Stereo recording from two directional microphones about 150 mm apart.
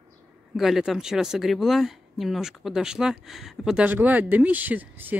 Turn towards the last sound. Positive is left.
turn(degrees=-10)  # may be behind; listen again after turning